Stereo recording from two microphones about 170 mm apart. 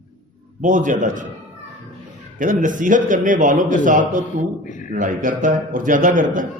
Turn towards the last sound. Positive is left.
turn(degrees=-50)  # may be behind; listen again after turning